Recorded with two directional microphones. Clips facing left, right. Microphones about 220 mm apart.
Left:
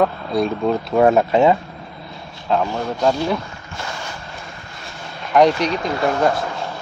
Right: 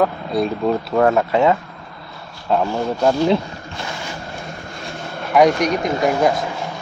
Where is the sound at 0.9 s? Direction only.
20° left (ahead or behind).